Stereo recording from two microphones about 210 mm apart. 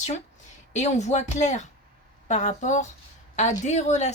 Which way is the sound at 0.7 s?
35° left (ahead or behind).